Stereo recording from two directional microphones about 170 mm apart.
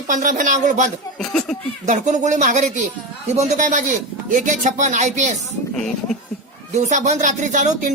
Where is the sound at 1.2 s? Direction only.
5° left (ahead or behind).